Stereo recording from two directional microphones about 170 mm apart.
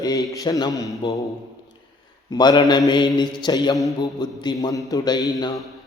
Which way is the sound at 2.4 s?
25° left (ahead or behind).